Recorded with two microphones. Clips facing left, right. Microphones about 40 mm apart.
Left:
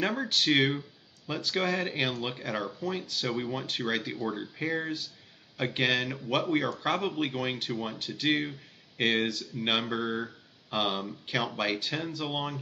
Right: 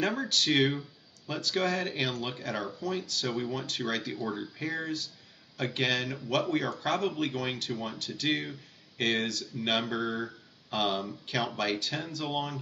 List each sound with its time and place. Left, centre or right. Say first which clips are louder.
0.0 s speech: left 1 dB; centre